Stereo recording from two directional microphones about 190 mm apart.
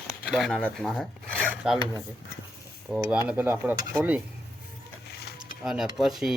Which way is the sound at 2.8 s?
10° right (ahead or behind).